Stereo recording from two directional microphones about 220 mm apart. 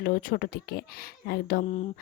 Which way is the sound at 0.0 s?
40° left (ahead or behind).